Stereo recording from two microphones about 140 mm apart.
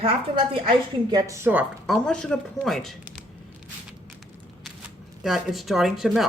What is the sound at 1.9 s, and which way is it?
A woman's voice, 5° left (ahead or behind).